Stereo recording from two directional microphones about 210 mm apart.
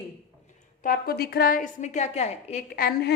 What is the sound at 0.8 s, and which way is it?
A woman's voice, 45° left (ahead or behind).